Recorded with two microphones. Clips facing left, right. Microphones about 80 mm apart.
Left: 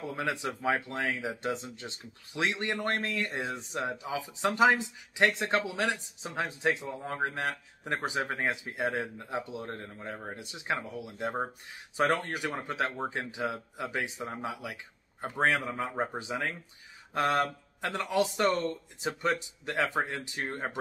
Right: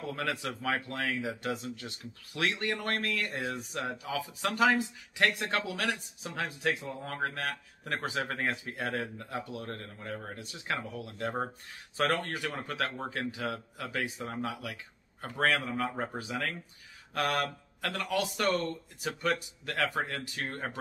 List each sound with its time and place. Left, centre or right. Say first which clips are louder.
0.1 s speech: left 2 dB; left